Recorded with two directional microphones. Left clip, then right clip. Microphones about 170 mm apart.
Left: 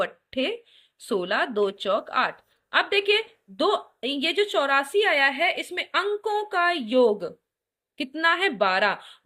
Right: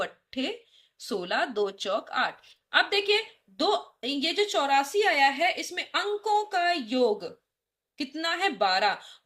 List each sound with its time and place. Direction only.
0.0 s a woman's voice: 30° left (ahead or behind)